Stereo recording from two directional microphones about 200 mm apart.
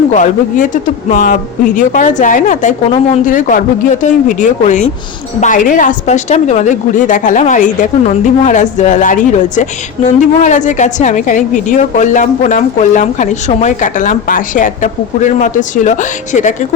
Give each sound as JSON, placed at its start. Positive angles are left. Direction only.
{"t": 0.1, "sound": "a woman's voice", "side_deg": 40}